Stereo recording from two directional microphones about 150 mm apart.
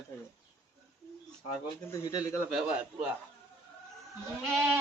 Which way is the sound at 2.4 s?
5° right (ahead or behind).